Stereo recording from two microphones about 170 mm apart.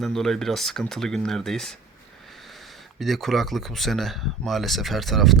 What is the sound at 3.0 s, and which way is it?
Speech, centre (ahead or behind).